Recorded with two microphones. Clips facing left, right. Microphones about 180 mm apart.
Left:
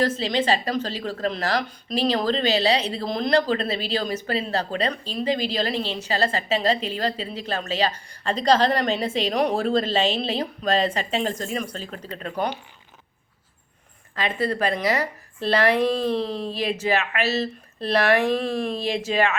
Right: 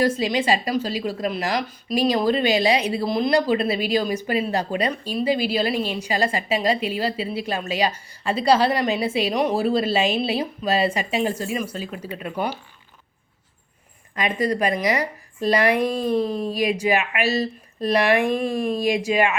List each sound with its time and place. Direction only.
0.0 s a woman's voice: 10° right (ahead or behind)
14.2 s a woman's voice: 15° right (ahead or behind)
16.2 s speech: 45° right (ahead or behind)
16.5 s a woman's voice: 15° right (ahead or behind)